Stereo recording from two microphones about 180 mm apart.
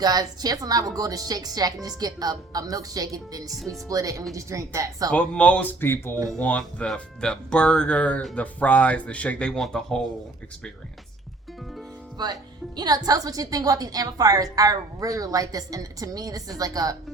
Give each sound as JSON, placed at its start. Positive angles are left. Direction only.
{"t": 0.0, "sound": "a woman's voice", "side_deg": -20}
{"t": 5.1, "sound": "speech", "side_deg": 5}
{"t": 12.1, "sound": "a woman's voice", "side_deg": -25}